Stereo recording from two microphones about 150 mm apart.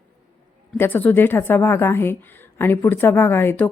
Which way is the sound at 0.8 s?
15° left (ahead or behind).